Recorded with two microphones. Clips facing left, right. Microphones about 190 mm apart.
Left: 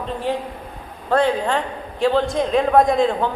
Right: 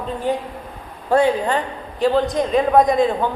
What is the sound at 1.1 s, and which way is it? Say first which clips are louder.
A man's voice: right 2 dB; 5° right (ahead or behind).